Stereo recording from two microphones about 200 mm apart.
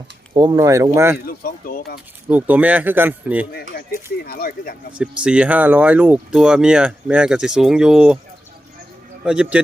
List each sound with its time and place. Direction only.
0.3 s speech: 20° right (ahead or behind)
1.3 s speech: 45° left (ahead or behind)
2.3 s speech: 5° right (ahead or behind)
3.5 s speech: 50° left (ahead or behind)
5.2 s speech: 5° right (ahead or behind)
9.2 s speech: 5° right (ahead or behind)